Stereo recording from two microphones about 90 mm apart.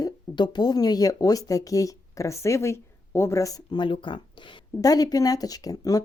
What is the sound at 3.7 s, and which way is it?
Speech, 65° left (ahead or behind).